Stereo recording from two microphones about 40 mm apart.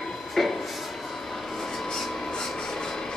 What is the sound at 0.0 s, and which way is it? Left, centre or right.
Train, centre.